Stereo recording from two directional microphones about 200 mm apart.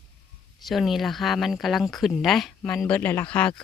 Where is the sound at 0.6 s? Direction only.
Centre (ahead or behind).